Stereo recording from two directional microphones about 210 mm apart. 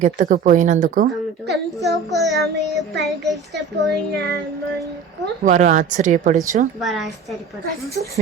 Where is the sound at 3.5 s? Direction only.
55° right (ahead or behind).